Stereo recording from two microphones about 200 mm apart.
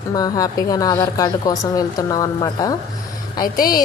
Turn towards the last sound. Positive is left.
turn(degrees=45)  # may be behind; listen again after turning